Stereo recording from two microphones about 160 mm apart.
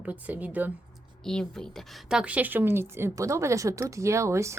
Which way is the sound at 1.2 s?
5° left (ahead or behind).